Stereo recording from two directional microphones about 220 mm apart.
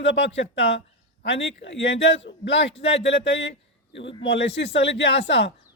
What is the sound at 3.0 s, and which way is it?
A man's voice, 55° left (ahead or behind).